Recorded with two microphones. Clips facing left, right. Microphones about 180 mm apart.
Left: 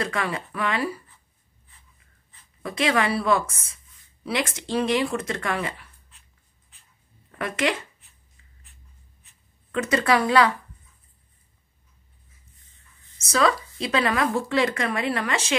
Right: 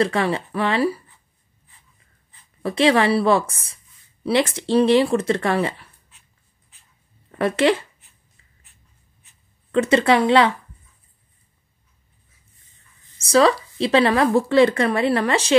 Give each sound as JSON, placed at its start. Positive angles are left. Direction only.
{"t": 0.0, "sound": "speech", "side_deg": -30}
{"t": 2.6, "sound": "speech", "side_deg": -30}
{"t": 7.2, "sound": "speech", "side_deg": -35}
{"t": 9.7, "sound": "speech", "side_deg": -30}
{"t": 13.2, "sound": "speech", "side_deg": -30}